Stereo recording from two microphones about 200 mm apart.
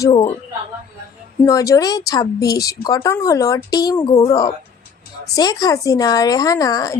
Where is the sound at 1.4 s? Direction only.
15° left (ahead or behind).